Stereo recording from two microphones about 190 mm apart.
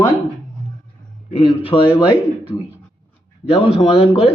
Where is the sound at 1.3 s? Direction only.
30° left (ahead or behind).